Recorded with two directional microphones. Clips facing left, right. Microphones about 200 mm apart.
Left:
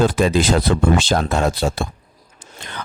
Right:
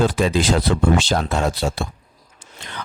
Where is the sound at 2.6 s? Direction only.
50° left (ahead or behind).